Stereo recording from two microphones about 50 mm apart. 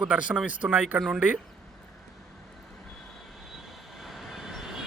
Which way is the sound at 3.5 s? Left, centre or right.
Centre.